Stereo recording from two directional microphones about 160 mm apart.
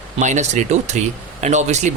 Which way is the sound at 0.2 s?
50° right (ahead or behind).